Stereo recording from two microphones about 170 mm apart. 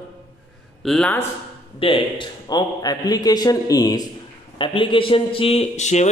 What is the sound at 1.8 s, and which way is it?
A man's voice, 30° left (ahead or behind).